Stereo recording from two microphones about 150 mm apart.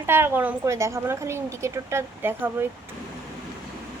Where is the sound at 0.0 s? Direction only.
15° right (ahead or behind).